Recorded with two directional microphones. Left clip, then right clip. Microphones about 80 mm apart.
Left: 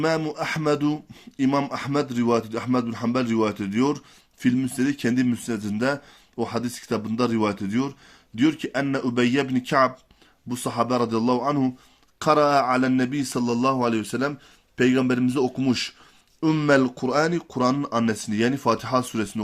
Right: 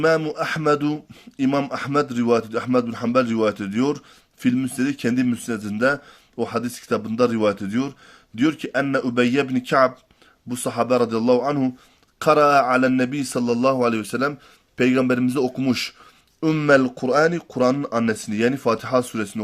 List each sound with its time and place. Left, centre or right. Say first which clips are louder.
0.0 s a man's voice: right 5 dB; right